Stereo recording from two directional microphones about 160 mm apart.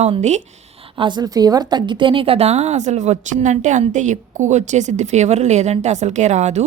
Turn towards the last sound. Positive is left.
turn(degrees=-45)  # may be behind; listen again after turning